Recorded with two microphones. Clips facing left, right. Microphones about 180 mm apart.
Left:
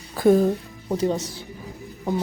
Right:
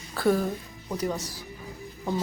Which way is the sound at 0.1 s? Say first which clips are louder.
Left 7 dB; 20° left (ahead or behind).